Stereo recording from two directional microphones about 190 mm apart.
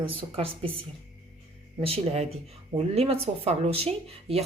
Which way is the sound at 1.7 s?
30° right (ahead or behind).